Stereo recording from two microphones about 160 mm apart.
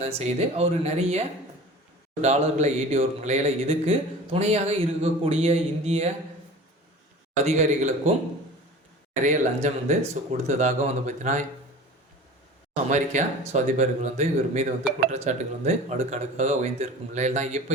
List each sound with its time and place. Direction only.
0.0 s speech: 40° right (ahead or behind)
7.4 s speech: 45° right (ahead or behind)
9.2 s speech: 50° right (ahead or behind)
12.7 s speech: 50° right (ahead or behind)